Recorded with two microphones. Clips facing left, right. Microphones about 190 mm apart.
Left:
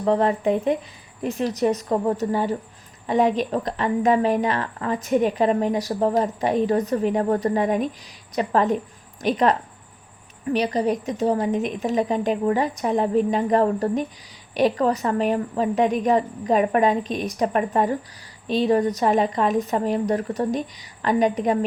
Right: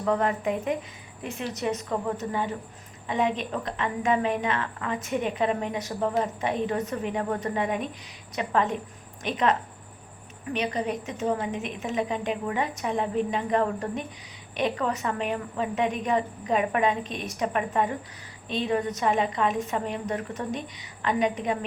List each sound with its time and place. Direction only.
0.0 s a woman's voice: 30° left (ahead or behind)